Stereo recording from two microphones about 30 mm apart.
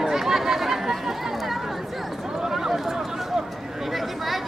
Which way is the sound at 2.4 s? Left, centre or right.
Centre.